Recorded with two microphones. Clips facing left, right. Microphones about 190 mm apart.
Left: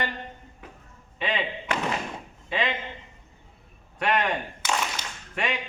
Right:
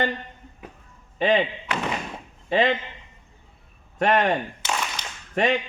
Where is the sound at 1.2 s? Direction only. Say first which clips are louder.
Right 8 dB; 45° right (ahead or behind).